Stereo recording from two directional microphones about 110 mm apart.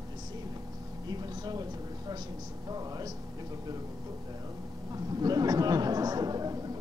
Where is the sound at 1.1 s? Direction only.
35° right (ahead or behind).